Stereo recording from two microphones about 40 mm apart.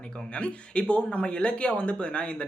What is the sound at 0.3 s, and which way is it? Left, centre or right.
Speech, left.